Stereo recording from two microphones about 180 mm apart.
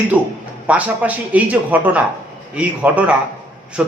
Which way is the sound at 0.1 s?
10° right (ahead or behind).